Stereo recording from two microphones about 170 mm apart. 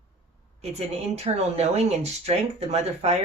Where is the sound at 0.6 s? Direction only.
35° right (ahead or behind).